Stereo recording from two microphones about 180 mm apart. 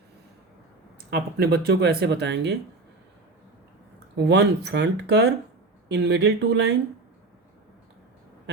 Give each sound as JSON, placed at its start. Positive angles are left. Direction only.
{"t": 1.1, "sound": "speech", "side_deg": -60}
{"t": 4.3, "sound": "speech", "side_deg": -70}